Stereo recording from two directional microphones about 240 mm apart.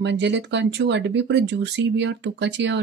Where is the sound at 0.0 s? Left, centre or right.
Right.